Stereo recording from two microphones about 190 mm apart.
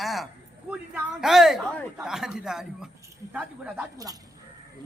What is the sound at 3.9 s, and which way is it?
Speech, 20° right (ahead or behind).